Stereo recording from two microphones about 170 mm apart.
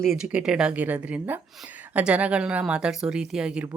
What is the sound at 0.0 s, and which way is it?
Speech, centre (ahead or behind).